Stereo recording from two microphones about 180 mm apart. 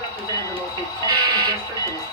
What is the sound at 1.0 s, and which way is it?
Speech, 25° right (ahead or behind).